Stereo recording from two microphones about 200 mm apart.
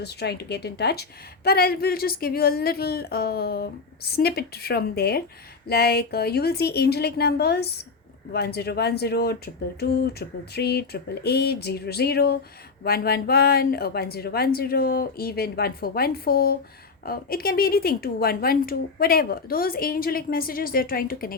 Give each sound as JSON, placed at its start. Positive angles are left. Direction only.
{"t": 0.0, "sound": "speech", "side_deg": 55}